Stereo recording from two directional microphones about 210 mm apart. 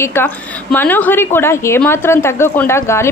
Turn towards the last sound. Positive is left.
turn(degrees=10)  # may be behind; listen again after turning